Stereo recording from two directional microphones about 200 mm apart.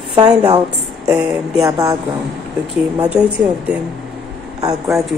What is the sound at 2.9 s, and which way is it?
Speech, 5° right (ahead or behind).